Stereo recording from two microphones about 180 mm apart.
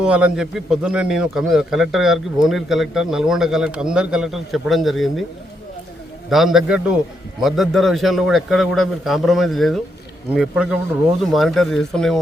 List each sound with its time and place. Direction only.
0.0 s a man's voice: 5° right (ahead or behind)
6.3 s a man's voice: centre (ahead or behind)